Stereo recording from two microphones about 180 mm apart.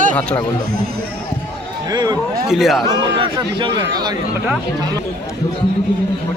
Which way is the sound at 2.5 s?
Centre (ahead or behind).